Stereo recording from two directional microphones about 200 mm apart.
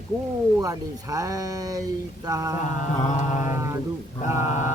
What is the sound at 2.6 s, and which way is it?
Mantra, 40° left (ahead or behind).